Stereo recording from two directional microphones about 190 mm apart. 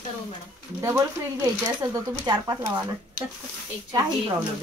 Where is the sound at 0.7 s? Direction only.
15° right (ahead or behind).